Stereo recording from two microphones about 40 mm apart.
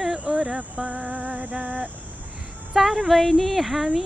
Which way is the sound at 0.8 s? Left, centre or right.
Right.